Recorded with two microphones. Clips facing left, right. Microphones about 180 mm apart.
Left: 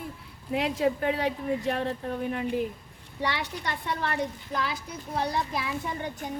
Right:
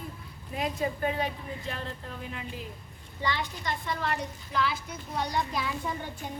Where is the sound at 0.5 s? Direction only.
75° left (ahead or behind); by 2.6 s 60° left (ahead or behind).